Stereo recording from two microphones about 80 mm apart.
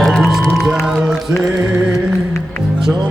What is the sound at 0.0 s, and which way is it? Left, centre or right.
Music, centre.